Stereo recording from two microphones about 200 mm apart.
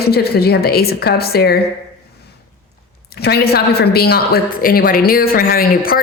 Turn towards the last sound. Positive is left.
turn(degrees=45)  # may be behind; listen again after turning